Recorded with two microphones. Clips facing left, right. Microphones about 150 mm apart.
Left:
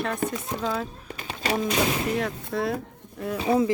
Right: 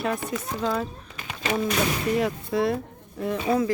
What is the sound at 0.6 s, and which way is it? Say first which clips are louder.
Speech: right 2 dB; centre (ahead or behind).